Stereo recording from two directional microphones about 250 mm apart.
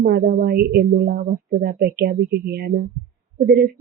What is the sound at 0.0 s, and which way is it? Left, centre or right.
A woman's voice, right.